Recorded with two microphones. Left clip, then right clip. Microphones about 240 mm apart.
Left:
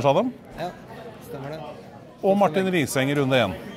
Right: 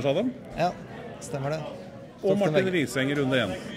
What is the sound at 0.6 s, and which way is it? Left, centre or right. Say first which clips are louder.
Speech: right 6 dB; right.